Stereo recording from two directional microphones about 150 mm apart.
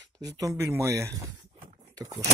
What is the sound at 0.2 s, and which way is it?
Speech, 25° right (ahead or behind).